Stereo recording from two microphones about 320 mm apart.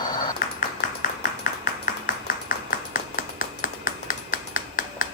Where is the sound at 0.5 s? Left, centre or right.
Left.